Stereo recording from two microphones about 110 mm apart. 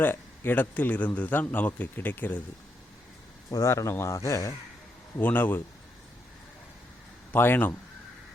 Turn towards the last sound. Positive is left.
turn(degrees=20)  # may be behind; listen again after turning